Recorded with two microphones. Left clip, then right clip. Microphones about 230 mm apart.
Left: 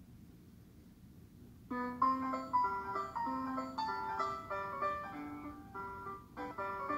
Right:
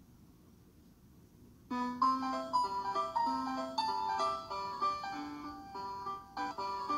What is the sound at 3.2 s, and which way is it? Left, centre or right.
Music, right.